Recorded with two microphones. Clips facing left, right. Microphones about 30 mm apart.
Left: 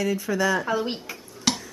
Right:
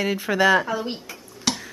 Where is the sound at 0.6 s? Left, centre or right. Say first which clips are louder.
Left 1 dB; centre.